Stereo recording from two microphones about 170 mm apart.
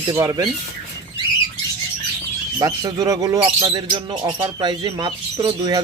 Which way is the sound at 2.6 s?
20° right (ahead or behind).